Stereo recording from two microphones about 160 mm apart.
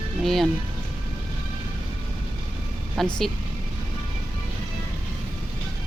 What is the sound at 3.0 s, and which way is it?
Speech, 5° left (ahead or behind).